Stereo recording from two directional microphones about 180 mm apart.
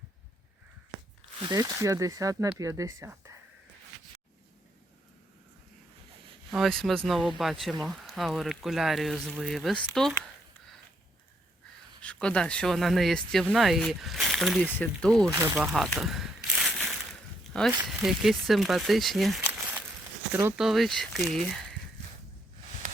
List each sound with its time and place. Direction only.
1.4 s speech: 20° right (ahead or behind)
6.5 s speech: centre (ahead or behind)
12.0 s speech: 5° left (ahead or behind)
15.3 s a sound: 15° right (ahead or behind)
17.8 s speech: centre (ahead or behind)
20.7 s speech: centre (ahead or behind)